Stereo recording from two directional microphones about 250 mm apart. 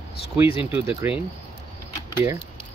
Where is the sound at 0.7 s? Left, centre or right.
Centre.